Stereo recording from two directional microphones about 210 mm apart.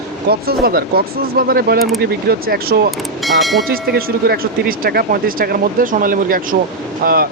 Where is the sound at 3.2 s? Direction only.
Centre (ahead or behind).